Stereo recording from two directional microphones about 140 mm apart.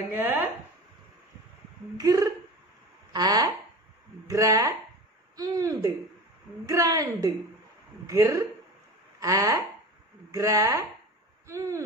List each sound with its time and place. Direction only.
0.1 s speech: 15° right (ahead or behind)
2.0 s speech: 25° right (ahead or behind)